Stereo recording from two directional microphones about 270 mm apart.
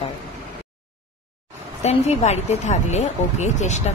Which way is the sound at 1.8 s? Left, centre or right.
Left.